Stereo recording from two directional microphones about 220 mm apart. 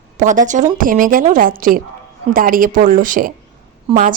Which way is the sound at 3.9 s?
25° right (ahead or behind).